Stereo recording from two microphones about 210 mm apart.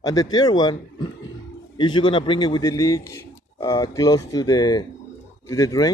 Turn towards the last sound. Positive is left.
turn(degrees=15)  # may be behind; listen again after turning